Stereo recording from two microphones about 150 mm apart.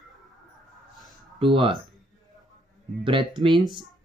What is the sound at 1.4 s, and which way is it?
Speech, 35° right (ahead or behind).